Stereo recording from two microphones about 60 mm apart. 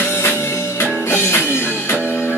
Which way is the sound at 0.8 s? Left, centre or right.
Left.